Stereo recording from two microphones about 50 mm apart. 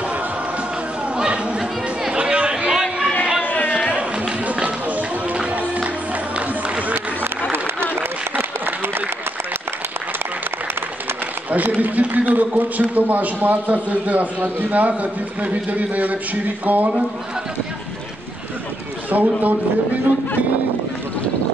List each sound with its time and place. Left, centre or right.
1.1 s chatter: right
3.4 s a sound: left
4.5 s music: right
6.3 s run: right
8.4 s applause: right
11.5 s a man's voice: right
19.0 s a man's voice: right